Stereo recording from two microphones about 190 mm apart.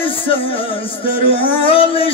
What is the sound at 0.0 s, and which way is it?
Music, 30° left (ahead or behind).